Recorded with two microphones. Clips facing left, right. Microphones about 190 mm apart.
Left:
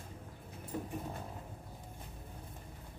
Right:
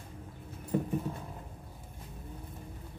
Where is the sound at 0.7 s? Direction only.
60° right (ahead or behind).